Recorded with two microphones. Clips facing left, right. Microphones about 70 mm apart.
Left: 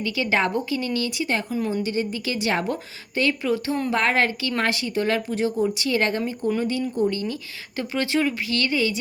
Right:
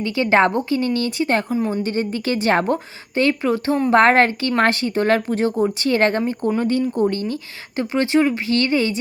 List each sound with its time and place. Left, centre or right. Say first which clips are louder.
0.0 s a woman's voice: right 6 dB; right
7.8 s a woman's voice: right 6 dB; right